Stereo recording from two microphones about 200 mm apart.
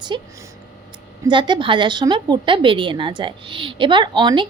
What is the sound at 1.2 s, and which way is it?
A woman's voice, 20° right (ahead or behind).